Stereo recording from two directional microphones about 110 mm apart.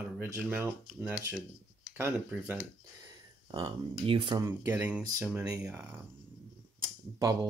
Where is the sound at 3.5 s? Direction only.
40° right (ahead or behind).